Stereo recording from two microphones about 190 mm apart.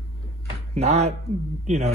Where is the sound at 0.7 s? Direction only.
35° right (ahead or behind).